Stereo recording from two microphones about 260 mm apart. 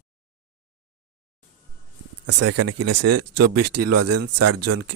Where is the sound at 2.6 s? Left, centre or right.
Right.